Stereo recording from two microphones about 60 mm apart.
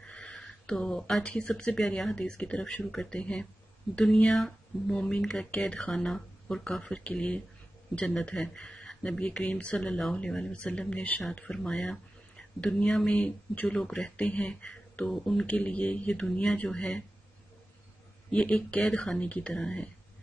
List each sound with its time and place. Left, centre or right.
0.0 s a sound: centre
1.2 s speech: centre
13.1 s speech: left; by 15.4 s centre
15.4 s speech: left
18.3 s speech: centre